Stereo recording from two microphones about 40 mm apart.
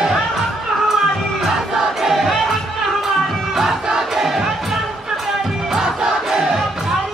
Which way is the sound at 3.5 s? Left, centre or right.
Centre.